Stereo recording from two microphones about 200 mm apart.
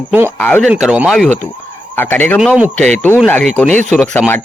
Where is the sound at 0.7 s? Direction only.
5° right (ahead or behind); by 4.4 s 10° left (ahead or behind).